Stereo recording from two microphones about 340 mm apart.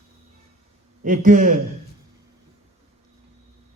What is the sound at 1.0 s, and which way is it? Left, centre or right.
Speech, right.